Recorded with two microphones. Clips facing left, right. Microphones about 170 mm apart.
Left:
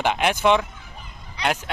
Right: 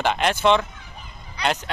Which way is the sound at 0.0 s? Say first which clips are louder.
Even; 10° left (ahead or behind).